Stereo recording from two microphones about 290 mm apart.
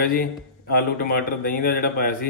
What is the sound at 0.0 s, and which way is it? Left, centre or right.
A man's voice, left.